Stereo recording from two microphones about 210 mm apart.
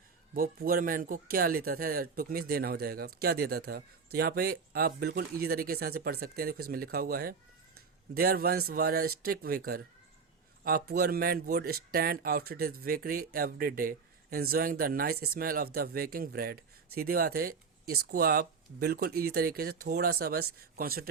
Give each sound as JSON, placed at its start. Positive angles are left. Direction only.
{"t": 0.3, "sound": "speech", "side_deg": -45}